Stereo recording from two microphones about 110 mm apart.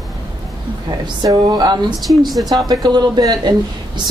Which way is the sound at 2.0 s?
Centre (ahead or behind).